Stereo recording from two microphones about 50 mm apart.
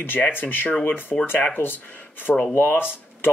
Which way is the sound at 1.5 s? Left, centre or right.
Left.